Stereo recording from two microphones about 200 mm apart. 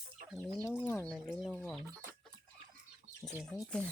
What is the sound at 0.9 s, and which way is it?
Speech, 10° left (ahead or behind).